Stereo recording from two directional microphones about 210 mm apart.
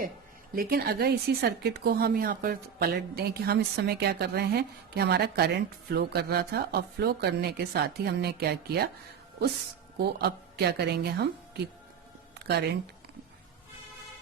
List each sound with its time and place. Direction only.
0.5 s speech: 45° right (ahead or behind)
10.0 s speech: 50° right (ahead or behind)
12.4 s a sound: 50° right (ahead or behind)